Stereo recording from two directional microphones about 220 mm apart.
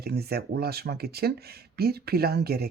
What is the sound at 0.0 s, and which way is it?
Speech, 45° right (ahead or behind).